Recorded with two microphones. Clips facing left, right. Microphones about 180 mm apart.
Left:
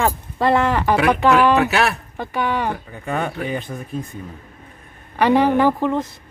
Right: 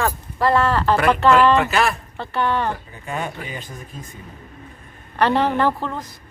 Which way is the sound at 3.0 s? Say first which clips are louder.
Left 5 dB; 60° left (ahead or behind).